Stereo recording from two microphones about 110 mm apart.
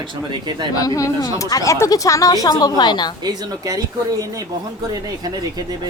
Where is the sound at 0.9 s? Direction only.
30° left (ahead or behind).